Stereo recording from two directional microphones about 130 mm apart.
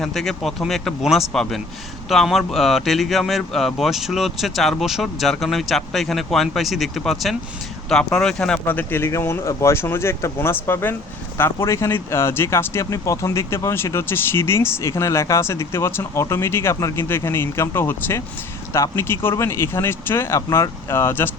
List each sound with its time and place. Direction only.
0.0 s speech: centre (ahead or behind); by 21.2 s 20° left (ahead or behind)